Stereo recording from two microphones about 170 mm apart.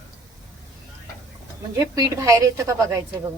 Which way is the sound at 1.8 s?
20° right (ahead or behind).